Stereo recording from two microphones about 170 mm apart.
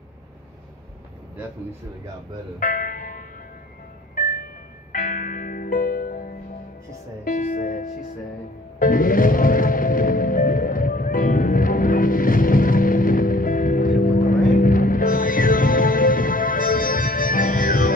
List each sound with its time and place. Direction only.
2.6 s music: 55° left (ahead or behind)